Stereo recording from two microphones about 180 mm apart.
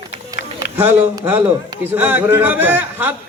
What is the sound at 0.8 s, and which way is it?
A man's voice, 10° right (ahead or behind).